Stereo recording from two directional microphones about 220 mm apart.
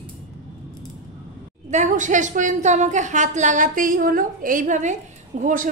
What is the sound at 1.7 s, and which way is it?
A woman's voice, 35° right (ahead or behind).